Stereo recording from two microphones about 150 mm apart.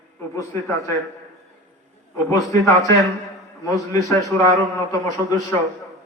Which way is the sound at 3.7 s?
20° left (ahead or behind).